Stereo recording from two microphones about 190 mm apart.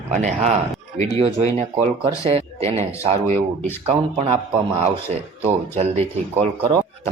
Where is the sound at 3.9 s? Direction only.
35° right (ahead or behind).